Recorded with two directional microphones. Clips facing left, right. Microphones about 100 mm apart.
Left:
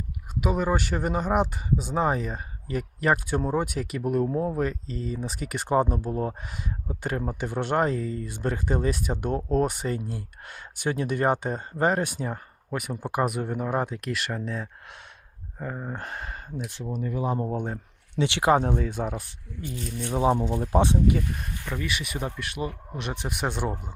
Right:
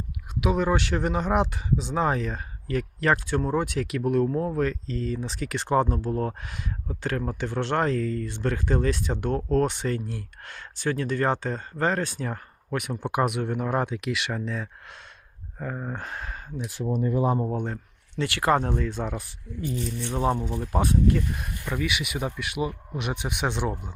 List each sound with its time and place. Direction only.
0.3 s speech: 5° left (ahead or behind)
16.8 s speech: 35° right (ahead or behind)
17.5 s speech: 10° left (ahead or behind)
18.5 s speech: 10° left (ahead or behind)
20.5 s speech: 25° left (ahead or behind)
21.7 s speech: 5° right (ahead or behind)